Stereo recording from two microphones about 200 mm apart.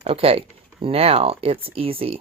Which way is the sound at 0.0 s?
30° right (ahead or behind).